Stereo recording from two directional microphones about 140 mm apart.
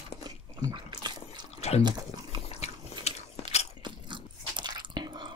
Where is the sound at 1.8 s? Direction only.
30° right (ahead or behind).